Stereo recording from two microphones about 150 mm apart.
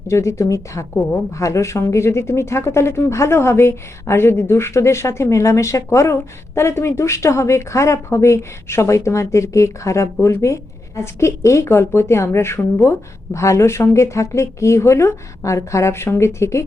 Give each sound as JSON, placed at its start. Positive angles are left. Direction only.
{"t": 0.1, "sound": "a woman's voice", "side_deg": 20}